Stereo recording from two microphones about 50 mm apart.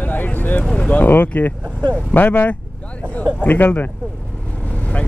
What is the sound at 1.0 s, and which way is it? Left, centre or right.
Speech, left.